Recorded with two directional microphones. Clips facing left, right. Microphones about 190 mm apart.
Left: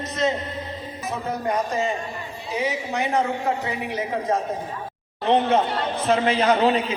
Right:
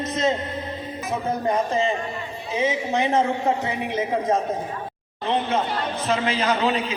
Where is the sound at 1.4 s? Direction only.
30° right (ahead or behind).